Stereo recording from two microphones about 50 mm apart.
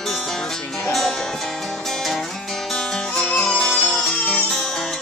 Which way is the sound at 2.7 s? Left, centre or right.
Centre.